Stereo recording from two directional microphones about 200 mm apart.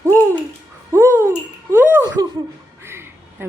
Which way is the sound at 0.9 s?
15° right (ahead or behind).